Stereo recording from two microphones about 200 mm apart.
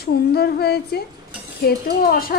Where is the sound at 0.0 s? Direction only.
50° left (ahead or behind).